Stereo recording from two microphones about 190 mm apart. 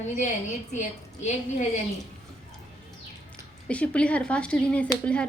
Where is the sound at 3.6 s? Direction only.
5° left (ahead or behind).